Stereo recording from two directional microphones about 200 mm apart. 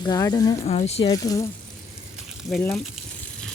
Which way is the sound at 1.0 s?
20° left (ahead or behind).